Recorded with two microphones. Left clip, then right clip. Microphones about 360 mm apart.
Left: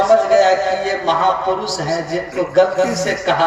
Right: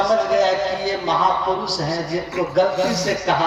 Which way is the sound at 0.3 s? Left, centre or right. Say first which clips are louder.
Left 5 dB; left.